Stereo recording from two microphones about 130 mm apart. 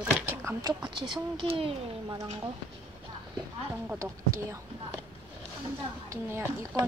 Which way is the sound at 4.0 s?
25° right (ahead or behind).